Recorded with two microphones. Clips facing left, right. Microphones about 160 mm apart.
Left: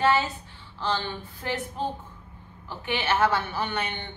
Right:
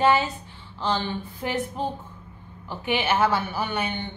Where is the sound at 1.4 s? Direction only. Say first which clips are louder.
Right 2 dB; 15° right (ahead or behind).